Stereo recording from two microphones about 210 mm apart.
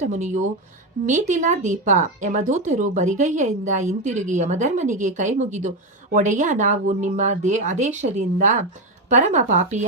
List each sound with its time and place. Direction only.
0.0 s speech: 35° right (ahead or behind)